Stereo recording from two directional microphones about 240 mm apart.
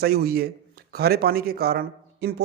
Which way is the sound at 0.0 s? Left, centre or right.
Right.